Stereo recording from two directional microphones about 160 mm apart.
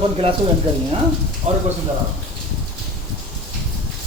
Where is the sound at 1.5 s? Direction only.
40° right (ahead or behind).